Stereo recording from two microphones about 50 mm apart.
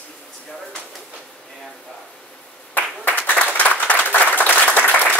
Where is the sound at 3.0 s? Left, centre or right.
Left.